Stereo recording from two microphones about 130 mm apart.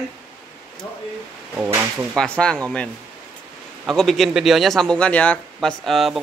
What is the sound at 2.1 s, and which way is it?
Speech, 5° left (ahead or behind).